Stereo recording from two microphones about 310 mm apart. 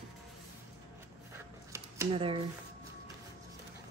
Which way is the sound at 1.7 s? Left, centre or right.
Centre.